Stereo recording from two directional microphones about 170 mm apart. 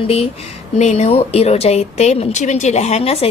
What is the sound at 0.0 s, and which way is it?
Speech, 35° left (ahead or behind).